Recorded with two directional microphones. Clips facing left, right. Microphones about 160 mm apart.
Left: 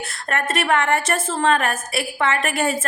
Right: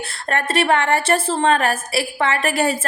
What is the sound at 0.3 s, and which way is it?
A woman's voice, 30° right (ahead or behind).